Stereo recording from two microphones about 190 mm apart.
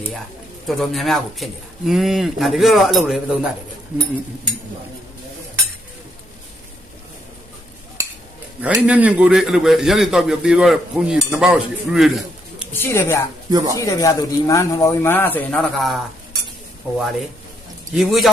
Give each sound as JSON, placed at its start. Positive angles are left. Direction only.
{"t": 0.7, "sound": "a man's voice", "side_deg": 0}
{"t": 8.6, "sound": "a man's voice", "side_deg": -5}
{"t": 12.7, "sound": "speech", "side_deg": 15}
{"t": 13.5, "sound": "speech", "side_deg": -20}
{"t": 13.7, "sound": "speech", "side_deg": 15}
{"t": 17.9, "sound": "a man's voice", "side_deg": 0}